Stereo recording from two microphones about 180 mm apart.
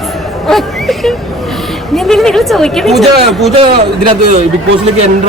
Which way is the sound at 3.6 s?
25° right (ahead or behind).